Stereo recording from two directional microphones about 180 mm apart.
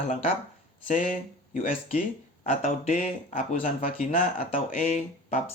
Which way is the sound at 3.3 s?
45° left (ahead or behind).